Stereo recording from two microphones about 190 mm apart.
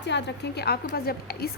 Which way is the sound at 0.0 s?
65° left (ahead or behind).